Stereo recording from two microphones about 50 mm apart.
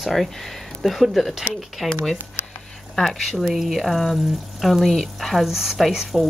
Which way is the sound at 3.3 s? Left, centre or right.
Centre.